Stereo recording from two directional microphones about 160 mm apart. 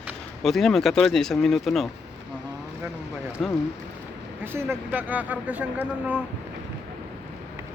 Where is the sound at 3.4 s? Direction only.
Centre (ahead or behind).